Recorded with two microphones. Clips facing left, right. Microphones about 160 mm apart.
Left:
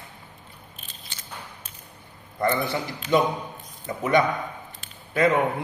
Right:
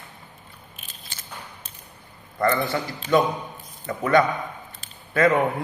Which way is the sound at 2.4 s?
20° left (ahead or behind).